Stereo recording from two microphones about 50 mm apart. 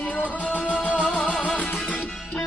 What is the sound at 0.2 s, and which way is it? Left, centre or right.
Music, left.